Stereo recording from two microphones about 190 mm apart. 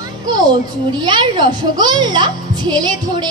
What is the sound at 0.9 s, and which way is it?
A woman's voice, 25° right (ahead or behind).